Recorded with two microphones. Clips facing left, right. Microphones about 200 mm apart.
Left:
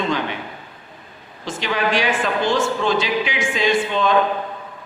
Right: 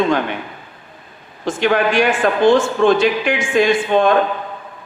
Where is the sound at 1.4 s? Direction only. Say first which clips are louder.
Right 6 dB; 50° right (ahead or behind).